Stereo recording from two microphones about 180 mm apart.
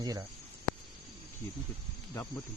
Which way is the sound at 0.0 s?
20° right (ahead or behind).